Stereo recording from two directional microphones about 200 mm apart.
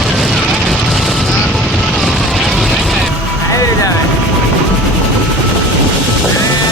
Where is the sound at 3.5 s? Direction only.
15° left (ahead or behind).